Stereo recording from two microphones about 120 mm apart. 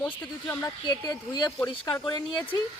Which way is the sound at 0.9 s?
35° left (ahead or behind).